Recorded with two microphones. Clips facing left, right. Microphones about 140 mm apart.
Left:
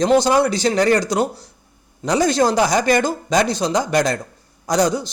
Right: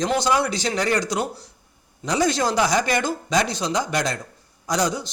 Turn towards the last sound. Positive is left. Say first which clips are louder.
# left 5 dB
turn(degrees=40)  # may be behind; listen again after turning